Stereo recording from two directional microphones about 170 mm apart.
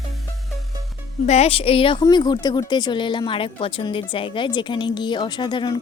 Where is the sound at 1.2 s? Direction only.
40° left (ahead or behind).